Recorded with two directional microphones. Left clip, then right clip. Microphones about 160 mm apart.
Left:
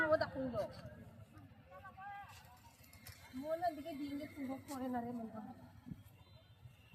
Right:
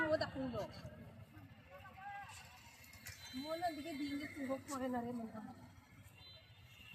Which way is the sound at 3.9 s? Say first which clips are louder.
Right 1 dB; 90° left.